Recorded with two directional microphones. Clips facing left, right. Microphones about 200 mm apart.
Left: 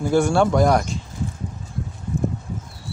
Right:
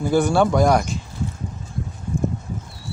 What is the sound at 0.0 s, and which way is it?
Speech, centre (ahead or behind).